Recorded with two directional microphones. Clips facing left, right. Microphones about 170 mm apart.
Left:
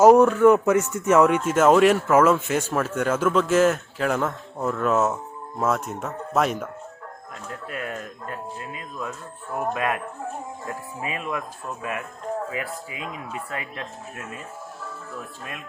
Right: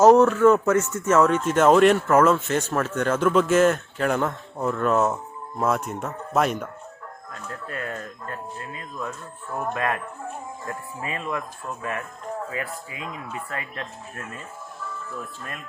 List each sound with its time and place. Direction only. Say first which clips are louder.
0.0 s speech: left 1 dB; 10° left (ahead or behind)
7.7 s speech: even; 10° left (ahead or behind)